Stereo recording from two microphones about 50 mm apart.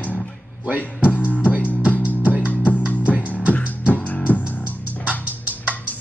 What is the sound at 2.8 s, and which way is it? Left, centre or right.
Music, right.